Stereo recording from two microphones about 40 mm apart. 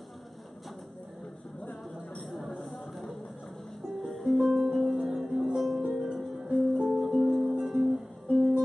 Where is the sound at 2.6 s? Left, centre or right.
Centre.